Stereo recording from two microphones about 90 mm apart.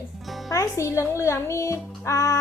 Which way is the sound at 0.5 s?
35° left (ahead or behind).